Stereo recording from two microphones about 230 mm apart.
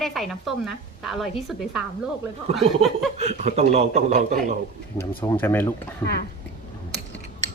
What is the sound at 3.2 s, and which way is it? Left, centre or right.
A man's voice, right.